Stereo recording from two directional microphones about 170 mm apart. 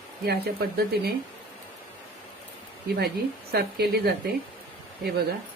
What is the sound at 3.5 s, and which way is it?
Speech, 70° right (ahead or behind).